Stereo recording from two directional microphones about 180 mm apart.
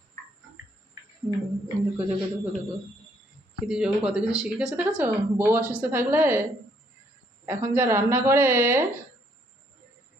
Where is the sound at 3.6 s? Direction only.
5° right (ahead or behind).